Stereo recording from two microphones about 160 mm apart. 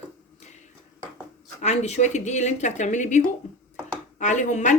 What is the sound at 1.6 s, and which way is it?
Speech, 45° left (ahead or behind).